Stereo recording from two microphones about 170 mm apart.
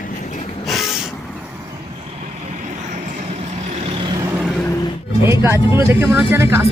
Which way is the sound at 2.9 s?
50° right (ahead or behind).